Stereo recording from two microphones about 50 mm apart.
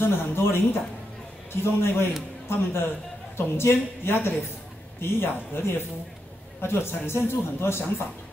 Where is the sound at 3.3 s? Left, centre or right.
Left.